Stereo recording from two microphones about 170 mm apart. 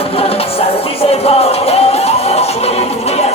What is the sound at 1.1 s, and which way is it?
Music, 35° left (ahead or behind).